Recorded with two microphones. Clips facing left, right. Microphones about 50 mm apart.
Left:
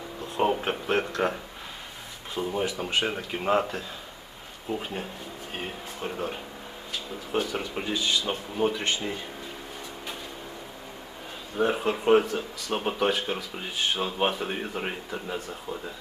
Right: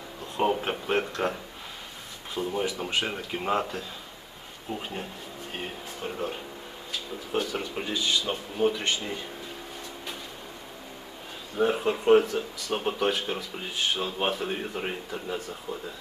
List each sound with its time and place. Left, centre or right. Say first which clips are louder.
0.3 s speech: left 1 dB; centre
7.5 s speech: left 1 dB; centre
11.5 s speech: even; centre